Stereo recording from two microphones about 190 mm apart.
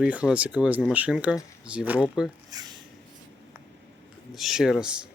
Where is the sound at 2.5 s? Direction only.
20° right (ahead or behind).